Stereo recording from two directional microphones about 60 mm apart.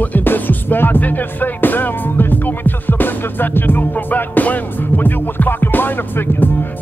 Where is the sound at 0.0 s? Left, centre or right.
Left.